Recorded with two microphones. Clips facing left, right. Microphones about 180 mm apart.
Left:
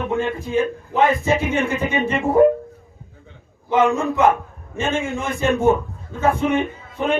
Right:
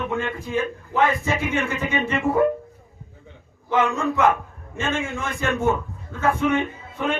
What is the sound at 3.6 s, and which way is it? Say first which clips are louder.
A man's voice: left 4 dB; 15° left (ahead or behind).